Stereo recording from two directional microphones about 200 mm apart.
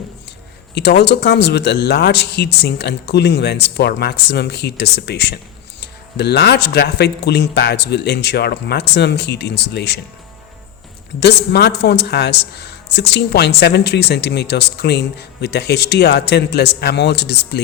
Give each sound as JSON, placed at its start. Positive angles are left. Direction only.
{"t": 0.7, "sound": "speech", "side_deg": 55}
{"t": 11.2, "sound": "speech", "side_deg": 55}